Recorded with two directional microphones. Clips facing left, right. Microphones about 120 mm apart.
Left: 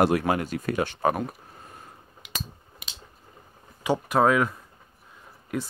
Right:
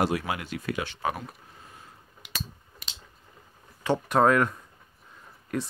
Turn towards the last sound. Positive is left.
turn(degrees=5)  # may be behind; listen again after turning